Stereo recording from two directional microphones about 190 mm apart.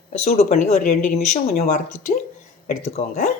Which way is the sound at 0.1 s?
35° left (ahead or behind).